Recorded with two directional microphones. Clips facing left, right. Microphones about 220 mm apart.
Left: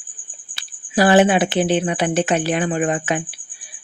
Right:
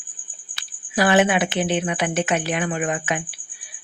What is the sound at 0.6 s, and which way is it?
Speech, 35° left (ahead or behind).